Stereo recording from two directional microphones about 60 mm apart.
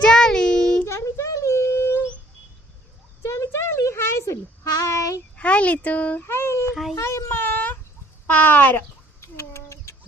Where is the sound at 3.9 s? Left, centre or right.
Left.